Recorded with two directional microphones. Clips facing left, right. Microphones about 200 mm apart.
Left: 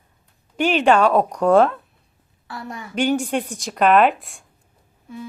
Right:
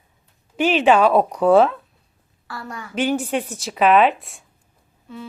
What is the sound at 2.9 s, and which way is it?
A woman's voice, centre (ahead or behind).